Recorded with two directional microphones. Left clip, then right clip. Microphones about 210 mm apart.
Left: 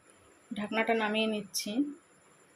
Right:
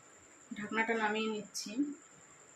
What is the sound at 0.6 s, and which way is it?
Speech, 25° left (ahead or behind).